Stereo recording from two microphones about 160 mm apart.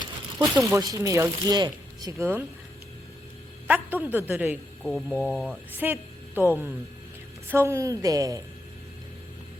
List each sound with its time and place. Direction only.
0.3 s a woman's voice: 15° right (ahead or behind)
3.7 s a woman's voice: 10° right (ahead or behind)
4.8 s a woman's voice: centre (ahead or behind); by 8.4 s 20° right (ahead or behind)